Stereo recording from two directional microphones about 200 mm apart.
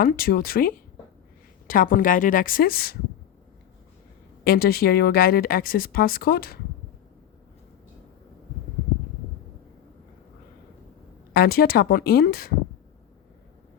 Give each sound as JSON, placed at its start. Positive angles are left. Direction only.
{"t": 0.0, "sound": "speech", "side_deg": 50}
{"t": 4.4, "sound": "speech", "side_deg": 50}
{"t": 11.3, "sound": "speech", "side_deg": 50}